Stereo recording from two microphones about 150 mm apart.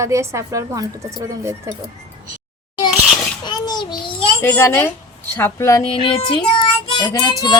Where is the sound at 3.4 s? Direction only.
30° left (ahead or behind).